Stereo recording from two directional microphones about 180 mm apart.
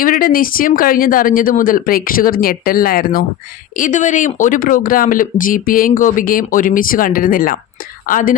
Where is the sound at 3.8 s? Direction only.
45° left (ahead or behind).